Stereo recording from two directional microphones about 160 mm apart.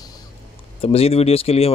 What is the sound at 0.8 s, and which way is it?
Speech, 40° left (ahead or behind).